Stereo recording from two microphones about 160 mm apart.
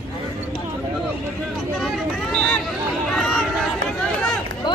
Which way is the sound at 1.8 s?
Centre (ahead or behind).